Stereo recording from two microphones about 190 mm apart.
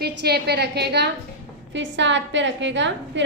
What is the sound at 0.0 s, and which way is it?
A woman's voice, 60° right (ahead or behind).